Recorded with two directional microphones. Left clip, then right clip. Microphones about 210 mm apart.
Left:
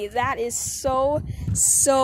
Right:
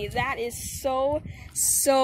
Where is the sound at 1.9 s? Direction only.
5° left (ahead or behind).